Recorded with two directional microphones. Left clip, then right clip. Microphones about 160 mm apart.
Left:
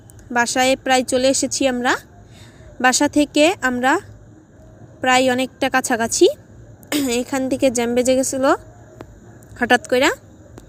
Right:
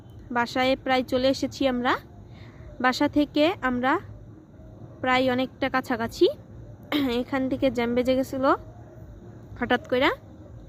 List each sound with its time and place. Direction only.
0.3 s speech: 10° left (ahead or behind)